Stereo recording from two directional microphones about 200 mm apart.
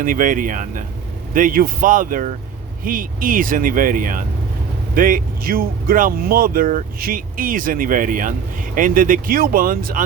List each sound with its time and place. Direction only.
0.0 s speech: 45° right (ahead or behind)